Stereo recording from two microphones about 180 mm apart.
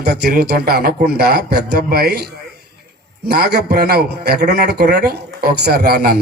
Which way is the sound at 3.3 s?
65° right (ahead or behind).